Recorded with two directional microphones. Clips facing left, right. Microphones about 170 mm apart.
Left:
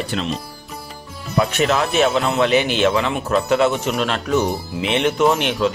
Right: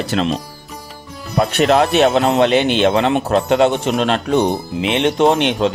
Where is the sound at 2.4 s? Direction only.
25° right (ahead or behind).